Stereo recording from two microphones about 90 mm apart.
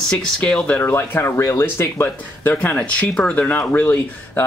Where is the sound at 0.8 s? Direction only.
25° left (ahead or behind).